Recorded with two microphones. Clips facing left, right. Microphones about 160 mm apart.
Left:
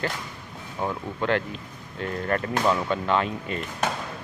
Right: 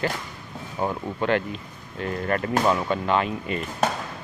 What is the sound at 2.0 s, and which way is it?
Speech, 5° right (ahead or behind).